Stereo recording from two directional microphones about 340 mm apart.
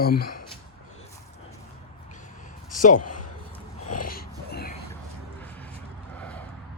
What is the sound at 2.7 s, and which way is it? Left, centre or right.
Speech, left.